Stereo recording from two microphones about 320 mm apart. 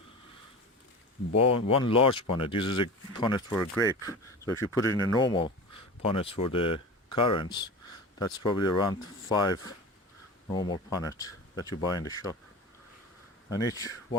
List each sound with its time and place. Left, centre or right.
1.3 s speech: left
1.6 s speech: centre
13.5 s speech: centre